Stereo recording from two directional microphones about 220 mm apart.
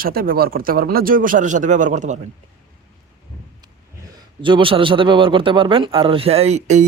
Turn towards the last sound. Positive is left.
turn(degrees=-35)  # may be behind; listen again after turning